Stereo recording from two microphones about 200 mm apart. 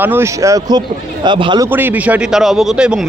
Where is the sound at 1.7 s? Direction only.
10° right (ahead or behind).